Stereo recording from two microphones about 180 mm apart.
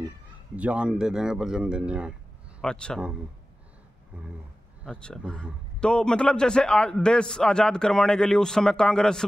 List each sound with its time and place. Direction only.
0.6 s a man's voice: 5° right (ahead or behind)
2.6 s a man's voice: 5° left (ahead or behind)
4.8 s a man's voice: 5° left (ahead or behind)